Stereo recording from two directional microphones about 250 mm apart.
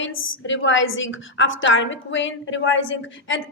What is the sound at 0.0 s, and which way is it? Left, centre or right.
A woman's voice, left.